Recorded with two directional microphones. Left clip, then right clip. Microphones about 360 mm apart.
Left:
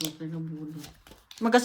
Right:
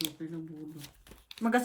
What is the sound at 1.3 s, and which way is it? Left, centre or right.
Speech, centre.